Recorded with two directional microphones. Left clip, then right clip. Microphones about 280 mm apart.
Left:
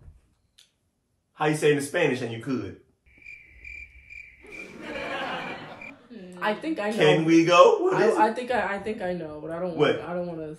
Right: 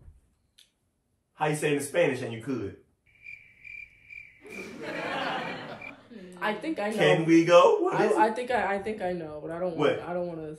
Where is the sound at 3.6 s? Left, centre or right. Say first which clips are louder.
Left 2 dB; centre.